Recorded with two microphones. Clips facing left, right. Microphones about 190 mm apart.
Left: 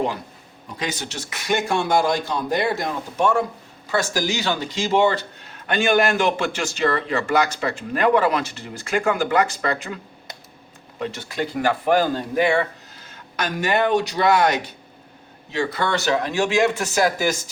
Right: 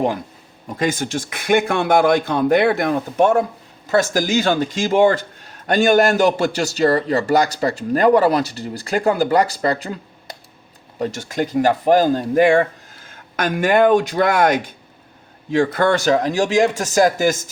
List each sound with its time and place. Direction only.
0.7 s speech: 50° right (ahead or behind)